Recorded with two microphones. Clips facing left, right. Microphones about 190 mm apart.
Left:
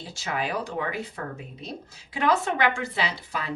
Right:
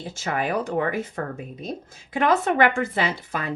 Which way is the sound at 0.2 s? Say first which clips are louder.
Right 4 dB; 50° right (ahead or behind).